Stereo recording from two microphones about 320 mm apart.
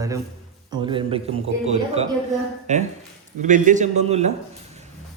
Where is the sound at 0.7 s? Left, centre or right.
Centre.